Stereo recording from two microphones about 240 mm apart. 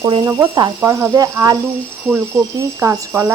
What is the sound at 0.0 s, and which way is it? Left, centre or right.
A woman's voice, centre.